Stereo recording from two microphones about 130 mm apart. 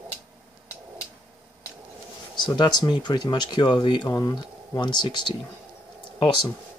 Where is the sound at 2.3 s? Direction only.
35° left (ahead or behind).